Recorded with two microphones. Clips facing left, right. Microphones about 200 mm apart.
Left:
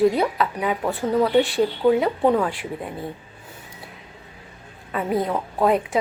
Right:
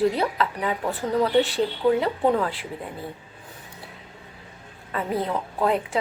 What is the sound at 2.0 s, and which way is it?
Speech, 15° left (ahead or behind).